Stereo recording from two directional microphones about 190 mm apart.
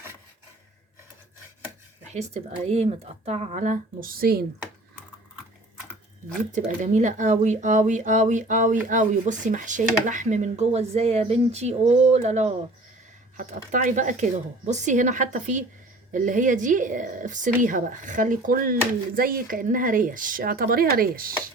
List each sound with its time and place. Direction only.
2.0 s speech: 35° right (ahead or behind); by 4.4 s 50° right (ahead or behind)
6.5 s speech: 40° right (ahead or behind)